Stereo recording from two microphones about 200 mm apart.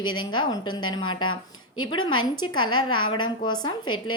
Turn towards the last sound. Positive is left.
turn(degrees=25)  # may be behind; listen again after turning